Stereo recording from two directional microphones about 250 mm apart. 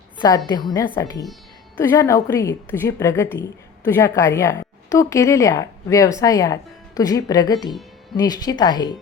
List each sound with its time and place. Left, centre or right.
0.2 s speech: centre